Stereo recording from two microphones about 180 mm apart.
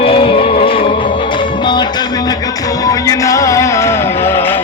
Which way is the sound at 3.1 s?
15° left (ahead or behind).